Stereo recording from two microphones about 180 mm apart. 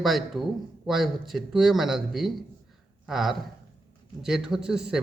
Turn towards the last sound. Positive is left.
turn(degrees=-5)  # may be behind; listen again after turning